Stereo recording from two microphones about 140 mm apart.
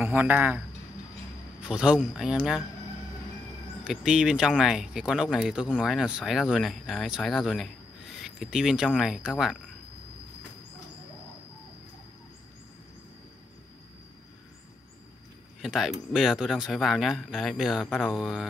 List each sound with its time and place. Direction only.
0.0 s a man's voice: 10° right (ahead or behind)
1.6 s speech: 5° right (ahead or behind)
3.8 s speech: 5° right (ahead or behind)
15.6 s speech: centre (ahead or behind)